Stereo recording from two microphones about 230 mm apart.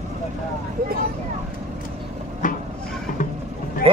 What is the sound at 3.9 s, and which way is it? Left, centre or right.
Speech, right.